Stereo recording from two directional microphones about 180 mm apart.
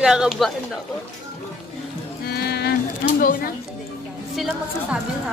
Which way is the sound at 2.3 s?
60° left (ahead or behind).